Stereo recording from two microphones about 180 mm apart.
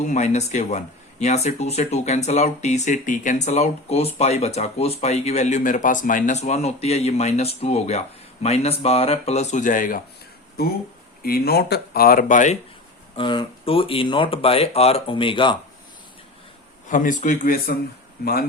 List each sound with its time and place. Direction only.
0.0 s speech: 40° left (ahead or behind)
10.6 s speech: 60° left (ahead or behind)
13.1 s speech: 25° left (ahead or behind)
16.9 s speech: 45° left (ahead or behind)